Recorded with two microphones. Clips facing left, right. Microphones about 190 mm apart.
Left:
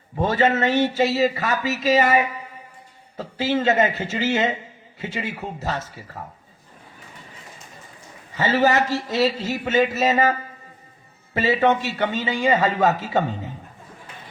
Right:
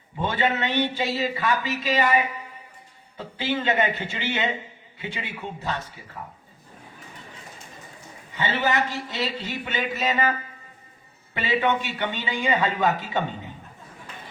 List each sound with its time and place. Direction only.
0.2 s a man's voice: 40° left (ahead or behind)
8.4 s a man's voice: 40° left (ahead or behind)
11.3 s a man's voice: 40° left (ahead or behind)